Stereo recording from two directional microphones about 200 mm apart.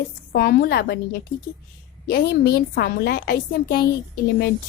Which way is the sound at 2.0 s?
50° left (ahead or behind).